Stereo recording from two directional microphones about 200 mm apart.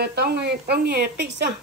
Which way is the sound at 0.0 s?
55° right (ahead or behind).